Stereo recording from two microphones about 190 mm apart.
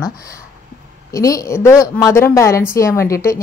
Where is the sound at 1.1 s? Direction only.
15° left (ahead or behind).